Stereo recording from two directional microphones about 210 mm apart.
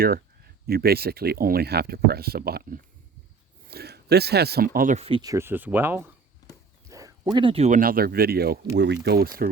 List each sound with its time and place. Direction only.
0.7 s speech: 45° right (ahead or behind); by 6.1 s 10° right (ahead or behind)
6.8 s a sound: 15° right (ahead or behind)
7.3 s speech: 25° right (ahead or behind); by 9.5 s 45° right (ahead or behind)